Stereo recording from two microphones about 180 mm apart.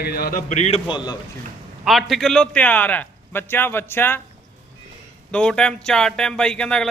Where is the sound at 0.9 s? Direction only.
25° left (ahead or behind).